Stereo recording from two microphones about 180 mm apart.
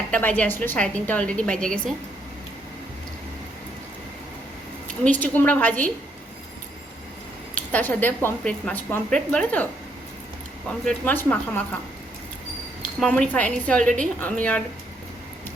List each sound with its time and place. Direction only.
0.1 s a woman's voice: 10° left (ahead or behind)
5.0 s a woman's voice: 10° left (ahead or behind)
7.5 s a woman's voice: 10° left (ahead or behind)
10.7 s a woman's voice: 5° left (ahead or behind)
13.0 s a woman's voice: 5° left (ahead or behind)